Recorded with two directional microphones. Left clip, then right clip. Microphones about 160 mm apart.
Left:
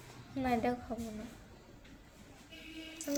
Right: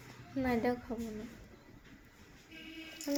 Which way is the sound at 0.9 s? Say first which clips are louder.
Even; 15° left (ahead or behind).